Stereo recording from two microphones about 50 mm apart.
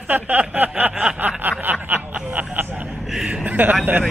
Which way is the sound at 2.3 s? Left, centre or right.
Right.